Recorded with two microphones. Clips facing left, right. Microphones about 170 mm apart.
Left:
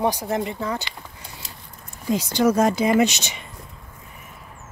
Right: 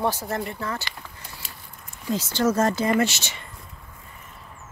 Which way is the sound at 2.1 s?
15° left (ahead or behind).